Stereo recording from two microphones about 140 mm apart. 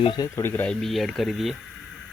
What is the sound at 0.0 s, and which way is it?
Speech, 35° left (ahead or behind).